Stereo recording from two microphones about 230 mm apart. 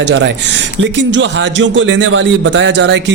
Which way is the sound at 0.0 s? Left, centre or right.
Right.